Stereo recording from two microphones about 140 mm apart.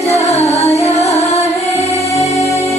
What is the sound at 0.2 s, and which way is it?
Music, 50° left (ahead or behind).